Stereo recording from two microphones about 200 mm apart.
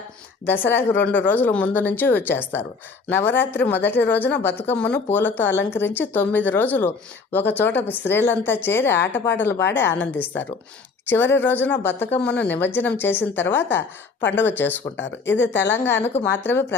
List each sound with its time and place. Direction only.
0.4 s speech: 10° left (ahead or behind)
15.3 s speech: 65° left (ahead or behind)
15.6 s speech: 10° left (ahead or behind)